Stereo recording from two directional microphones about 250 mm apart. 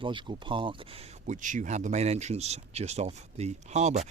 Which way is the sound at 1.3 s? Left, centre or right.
Right.